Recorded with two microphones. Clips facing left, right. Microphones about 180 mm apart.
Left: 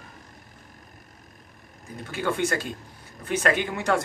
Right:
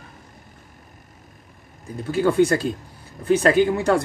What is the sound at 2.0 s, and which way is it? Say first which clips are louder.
Speech: right 9 dB; 35° right (ahead or behind).